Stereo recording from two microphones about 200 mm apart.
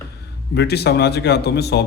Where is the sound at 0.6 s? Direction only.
55° left (ahead or behind).